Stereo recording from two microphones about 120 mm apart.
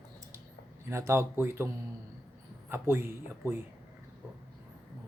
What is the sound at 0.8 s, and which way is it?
Speech, 20° right (ahead or behind).